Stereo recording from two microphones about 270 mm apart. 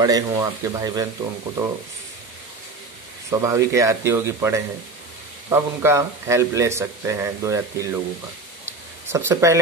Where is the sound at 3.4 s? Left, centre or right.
Centre.